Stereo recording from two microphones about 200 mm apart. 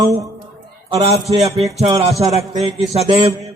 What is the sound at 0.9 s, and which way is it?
A man's voice, 30° right (ahead or behind).